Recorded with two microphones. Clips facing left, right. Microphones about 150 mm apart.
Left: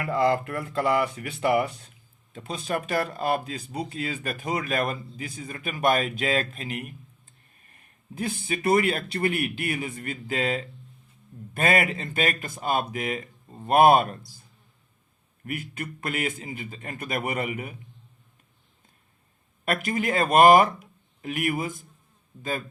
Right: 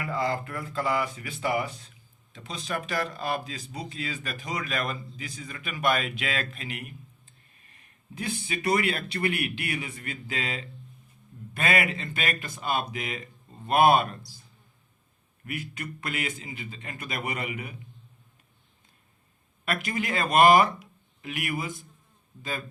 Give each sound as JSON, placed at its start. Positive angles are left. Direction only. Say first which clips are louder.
{"t": 0.0, "sound": "speech", "louder": "left 6 dB", "side_deg": 60}
{"t": 8.1, "sound": "speech", "louder": "left 3 dB", "side_deg": 50}
{"t": 15.4, "sound": "speech", "louder": "left 2 dB", "side_deg": 50}
{"t": 19.6, "sound": "speech", "louder": "left 4 dB", "side_deg": 45}